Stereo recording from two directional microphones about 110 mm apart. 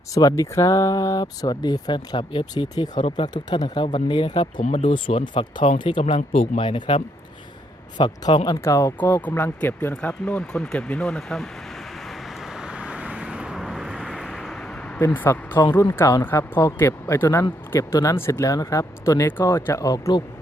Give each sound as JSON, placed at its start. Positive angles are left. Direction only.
{"t": 0.1, "sound": "speech", "side_deg": 30}
{"t": 3.8, "sound": "speech", "side_deg": 55}
{"t": 4.6, "sound": "speech", "side_deg": 90}
{"t": 4.9, "sound": "speech", "side_deg": 55}
{"t": 6.1, "sound": "speech", "side_deg": 75}
{"t": 6.6, "sound": "speech", "side_deg": 50}
{"t": 7.9, "sound": "speech", "side_deg": 45}
{"t": 8.4, "sound": "speech", "side_deg": 25}
{"t": 12.5, "sound": "vehicle", "side_deg": -10}
{"t": 14.9, "sound": "speech", "side_deg": 15}